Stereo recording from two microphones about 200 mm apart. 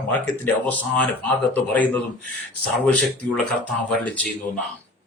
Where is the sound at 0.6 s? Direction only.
5° left (ahead or behind).